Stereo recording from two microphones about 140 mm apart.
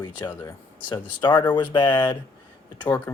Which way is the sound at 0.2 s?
25° left (ahead or behind).